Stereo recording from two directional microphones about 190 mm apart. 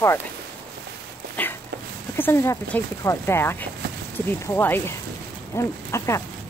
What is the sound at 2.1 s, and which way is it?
Speech, 10° left (ahead or behind).